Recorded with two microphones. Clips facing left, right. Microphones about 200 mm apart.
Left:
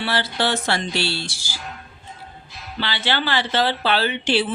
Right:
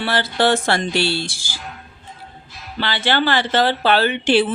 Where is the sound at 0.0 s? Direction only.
50° right (ahead or behind).